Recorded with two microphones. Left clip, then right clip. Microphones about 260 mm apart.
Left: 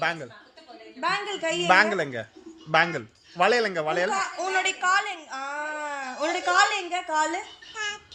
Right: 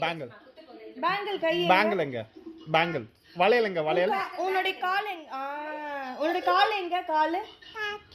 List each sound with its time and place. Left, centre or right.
0.0 s a woman's voice: centre